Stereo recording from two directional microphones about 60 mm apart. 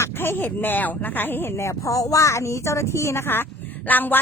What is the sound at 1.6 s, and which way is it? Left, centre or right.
Speech, left.